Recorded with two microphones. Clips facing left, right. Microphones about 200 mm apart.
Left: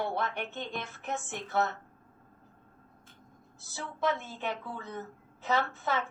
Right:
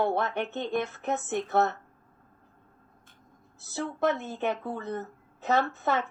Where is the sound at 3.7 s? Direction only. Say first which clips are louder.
Right 4 dB; 60° right (ahead or behind).